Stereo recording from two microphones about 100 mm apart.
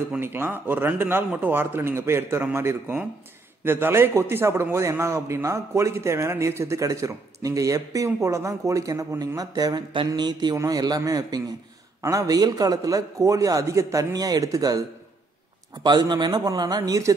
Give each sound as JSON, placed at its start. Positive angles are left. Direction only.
{"t": 0.2, "sound": "a man's voice", "side_deg": -20}